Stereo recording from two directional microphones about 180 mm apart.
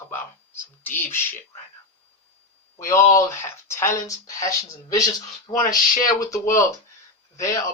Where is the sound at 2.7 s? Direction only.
15° left (ahead or behind).